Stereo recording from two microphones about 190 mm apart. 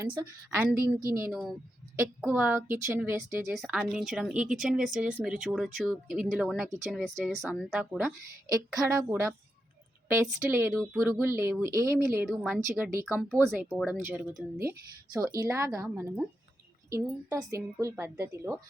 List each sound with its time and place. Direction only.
0.0 s a woman's voice: 25° right (ahead or behind)
0.6 s a woman's voice: 10° right (ahead or behind)
8.5 s a woman's voice: 15° right (ahead or behind)
12.3 s speech: centre (ahead or behind)
12.5 s a woman's voice: 10° right (ahead or behind)